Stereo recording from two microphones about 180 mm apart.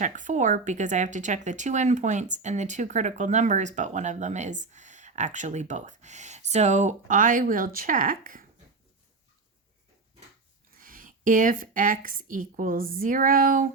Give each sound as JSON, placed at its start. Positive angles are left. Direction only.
{"t": 0.0, "sound": "speech", "side_deg": -45}
{"t": 10.8, "sound": "a woman's voice", "side_deg": -50}